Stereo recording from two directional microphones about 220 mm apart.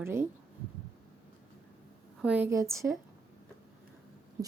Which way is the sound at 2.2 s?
5° right (ahead or behind).